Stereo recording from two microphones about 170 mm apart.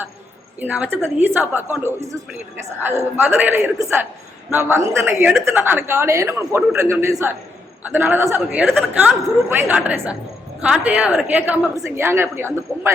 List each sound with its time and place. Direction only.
0.6 s a woman's voice: 10° right (ahead or behind)